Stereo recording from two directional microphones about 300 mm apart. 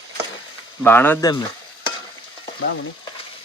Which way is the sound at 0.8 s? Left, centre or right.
Centre.